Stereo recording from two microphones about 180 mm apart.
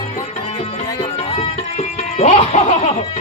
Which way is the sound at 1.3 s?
35° left (ahead or behind).